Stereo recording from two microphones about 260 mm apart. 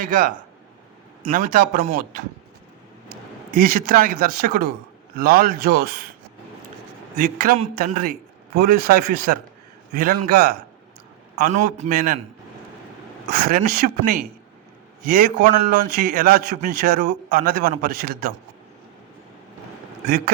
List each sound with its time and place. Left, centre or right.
0.0 s a man's voice: right
3.5 s a man's voice: right
7.2 s a man's voice: right
13.3 s a man's voice: right
20.1 s a man's voice: right